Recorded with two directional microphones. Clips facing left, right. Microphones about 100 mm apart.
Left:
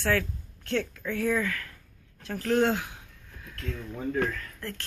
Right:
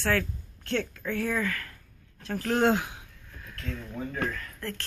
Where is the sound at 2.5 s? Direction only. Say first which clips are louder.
Even; 20° right (ahead or behind).